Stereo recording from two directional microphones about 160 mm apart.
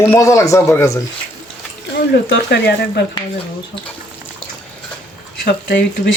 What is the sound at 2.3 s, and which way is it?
Speech, 90° left.